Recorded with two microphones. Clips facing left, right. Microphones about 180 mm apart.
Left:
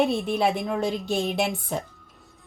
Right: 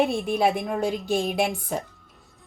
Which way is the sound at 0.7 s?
5° right (ahead or behind).